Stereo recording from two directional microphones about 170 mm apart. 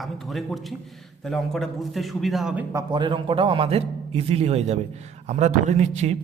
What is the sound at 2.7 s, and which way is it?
A man's voice, 25° right (ahead or behind).